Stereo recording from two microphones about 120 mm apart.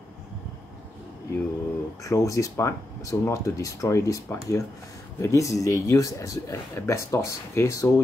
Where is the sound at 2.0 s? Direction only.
25° left (ahead or behind).